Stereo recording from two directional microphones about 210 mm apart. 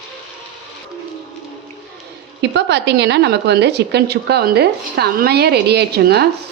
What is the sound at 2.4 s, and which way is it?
A woman's voice, 55° right (ahead or behind).